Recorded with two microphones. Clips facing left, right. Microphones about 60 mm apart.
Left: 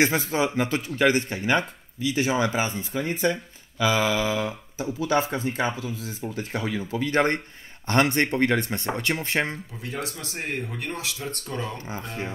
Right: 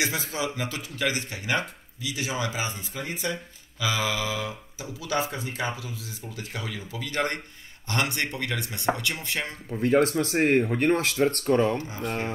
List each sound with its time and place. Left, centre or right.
0.0 s speech: left
9.7 s speech: right